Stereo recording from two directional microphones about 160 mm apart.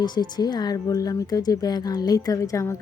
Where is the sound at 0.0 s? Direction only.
25° left (ahead or behind).